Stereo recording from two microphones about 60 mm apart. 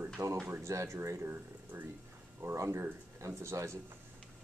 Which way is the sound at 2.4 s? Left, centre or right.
Right.